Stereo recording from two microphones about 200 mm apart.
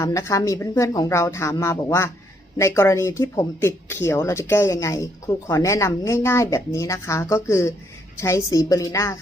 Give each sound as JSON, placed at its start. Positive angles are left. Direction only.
{"t": 0.0, "sound": "speech", "side_deg": 15}